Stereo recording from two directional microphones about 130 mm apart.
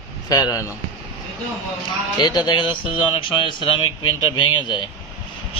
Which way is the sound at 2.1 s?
35° left (ahead or behind).